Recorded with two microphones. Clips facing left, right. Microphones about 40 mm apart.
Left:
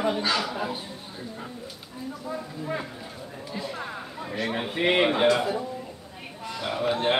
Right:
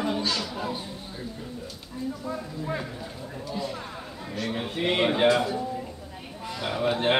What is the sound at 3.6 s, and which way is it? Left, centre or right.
Speech, centre.